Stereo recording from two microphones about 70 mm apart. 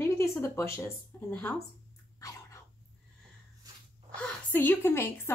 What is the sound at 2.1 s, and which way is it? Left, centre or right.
Dog, left.